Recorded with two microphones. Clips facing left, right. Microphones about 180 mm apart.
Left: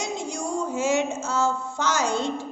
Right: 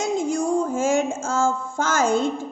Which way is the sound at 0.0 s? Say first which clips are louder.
Right 7 dB; 50° right (ahead or behind).